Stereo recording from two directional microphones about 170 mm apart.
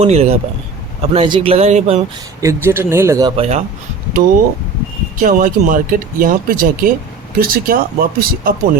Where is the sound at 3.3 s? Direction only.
35° right (ahead or behind).